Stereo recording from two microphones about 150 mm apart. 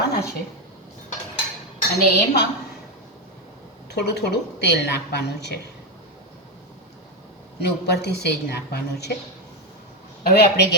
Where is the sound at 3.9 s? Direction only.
90° left.